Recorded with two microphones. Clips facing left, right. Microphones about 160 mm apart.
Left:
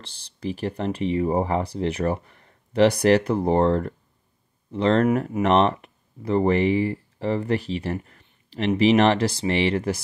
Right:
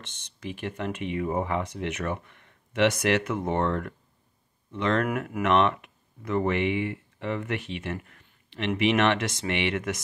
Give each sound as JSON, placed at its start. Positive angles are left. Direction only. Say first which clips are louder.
{"t": 0.0, "sound": "speech", "louder": "left 7 dB", "side_deg": 35}